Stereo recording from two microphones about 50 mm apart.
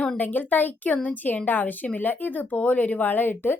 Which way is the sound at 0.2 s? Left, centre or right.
Left.